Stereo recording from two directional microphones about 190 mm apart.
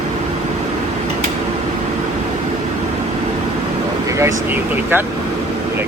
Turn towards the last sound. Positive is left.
turn(degrees=-10)  # may be behind; listen again after turning